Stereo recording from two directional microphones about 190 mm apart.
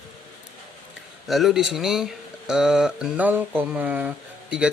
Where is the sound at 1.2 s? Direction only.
Centre (ahead or behind).